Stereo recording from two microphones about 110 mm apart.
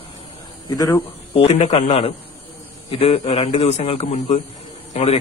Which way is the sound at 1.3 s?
65° left (ahead or behind).